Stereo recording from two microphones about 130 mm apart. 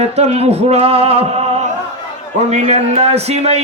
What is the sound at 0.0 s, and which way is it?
Music, 55° right (ahead or behind).